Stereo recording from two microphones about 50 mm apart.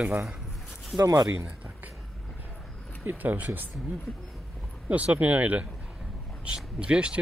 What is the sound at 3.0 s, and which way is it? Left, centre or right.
Speech, right.